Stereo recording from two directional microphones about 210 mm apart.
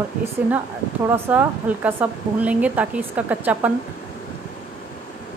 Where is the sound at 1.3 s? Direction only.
5° right (ahead or behind).